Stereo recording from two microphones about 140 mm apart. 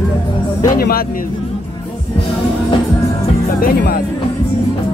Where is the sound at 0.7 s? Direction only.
90° left.